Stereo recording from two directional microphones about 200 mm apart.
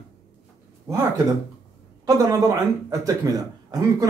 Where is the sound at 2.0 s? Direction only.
20° right (ahead or behind).